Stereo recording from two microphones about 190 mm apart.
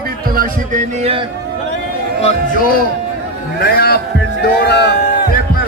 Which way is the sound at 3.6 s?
55° left (ahead or behind).